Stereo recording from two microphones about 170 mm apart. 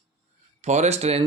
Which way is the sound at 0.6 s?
40° right (ahead or behind).